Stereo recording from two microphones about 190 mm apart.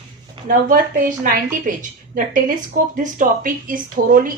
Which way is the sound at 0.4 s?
45° right (ahead or behind).